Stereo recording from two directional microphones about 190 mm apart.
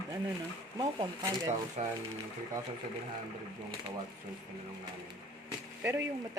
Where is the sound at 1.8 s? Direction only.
40° right (ahead or behind).